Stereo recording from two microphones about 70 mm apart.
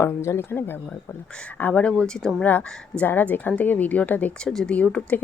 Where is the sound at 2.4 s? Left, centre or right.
Left.